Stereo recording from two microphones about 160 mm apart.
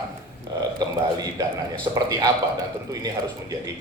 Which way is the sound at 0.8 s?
25° right (ahead or behind).